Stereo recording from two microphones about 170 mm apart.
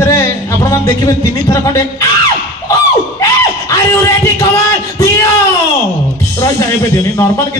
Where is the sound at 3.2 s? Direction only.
20° left (ahead or behind).